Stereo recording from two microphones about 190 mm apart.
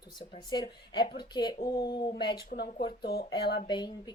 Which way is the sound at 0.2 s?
25° left (ahead or behind).